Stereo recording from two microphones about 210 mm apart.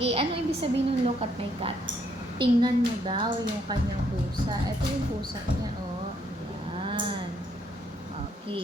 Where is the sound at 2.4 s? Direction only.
20° right (ahead or behind).